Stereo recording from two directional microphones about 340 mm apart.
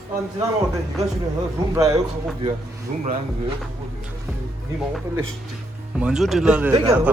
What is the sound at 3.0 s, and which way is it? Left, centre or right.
Speech, right.